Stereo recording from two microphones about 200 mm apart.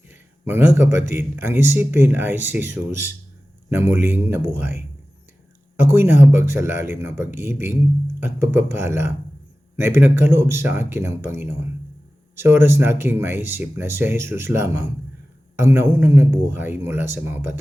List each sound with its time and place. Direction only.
0.1 s a sound: 10° right (ahead or behind)
1.1 s speech: 10° right (ahead or behind)
5.8 s speech: 10° right (ahead or behind)